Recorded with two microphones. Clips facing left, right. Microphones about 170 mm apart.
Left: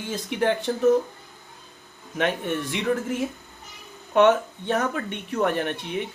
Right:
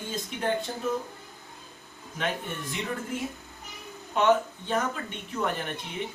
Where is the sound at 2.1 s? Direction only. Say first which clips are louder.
Left 7 dB; 70° left (ahead or behind).